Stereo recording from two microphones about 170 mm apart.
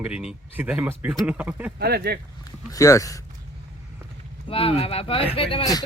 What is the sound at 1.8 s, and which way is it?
Speech, 70° right (ahead or behind).